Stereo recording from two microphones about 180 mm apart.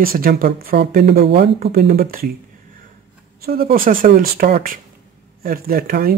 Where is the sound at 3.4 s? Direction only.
55° right (ahead or behind).